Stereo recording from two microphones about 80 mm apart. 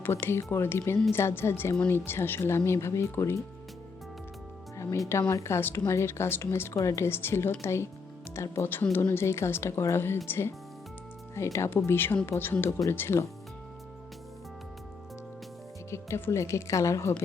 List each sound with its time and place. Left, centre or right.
0.0 s speech: left
5.3 s speech: left
15.9 s speech: left